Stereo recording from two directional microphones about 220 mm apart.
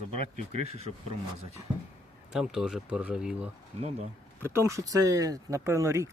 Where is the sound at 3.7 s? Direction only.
30° right (ahead or behind).